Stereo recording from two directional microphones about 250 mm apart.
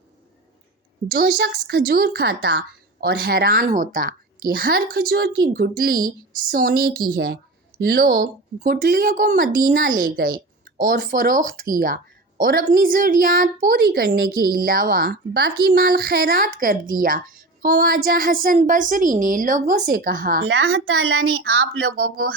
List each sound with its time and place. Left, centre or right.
1.0 s a woman's voice: right